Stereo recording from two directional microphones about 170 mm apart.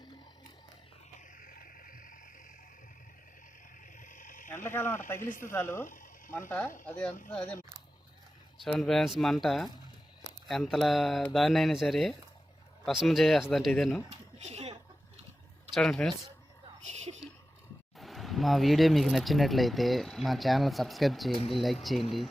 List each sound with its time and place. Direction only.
1.4 s cricket: 55° left (ahead or behind)
4.0 s insect: 50° left (ahead or behind)
4.6 s speech: 15° left (ahead or behind)
8.6 s speech: centre (ahead or behind)
14.4 s chuckle: 40° right (ahead or behind)
15.7 s speech: 5° left (ahead or behind)
16.8 s a sound: 40° right (ahead or behind)
17.9 s speech: centre (ahead or behind)